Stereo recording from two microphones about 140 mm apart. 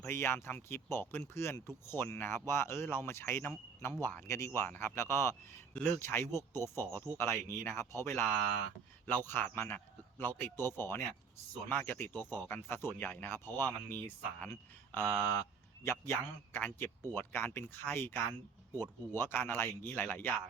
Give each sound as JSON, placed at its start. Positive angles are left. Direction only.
{"t": 0.0, "sound": "a man's voice", "side_deg": 15}
{"t": 15.8, "sound": "a man's voice", "side_deg": 20}